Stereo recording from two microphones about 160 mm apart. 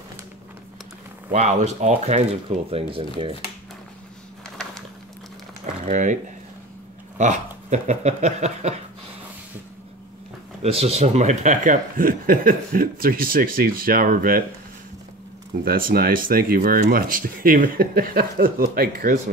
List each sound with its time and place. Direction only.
1.3 s speech: 45° right (ahead or behind)
2.7 s speech: 35° right (ahead or behind)
5.9 s speech: 50° right (ahead or behind)
7.2 s speech: 45° right (ahead or behind)
10.6 s speech: 40° right (ahead or behind); by 14.4 s 65° right (ahead or behind)
15.6 s speech: 65° right (ahead or behind)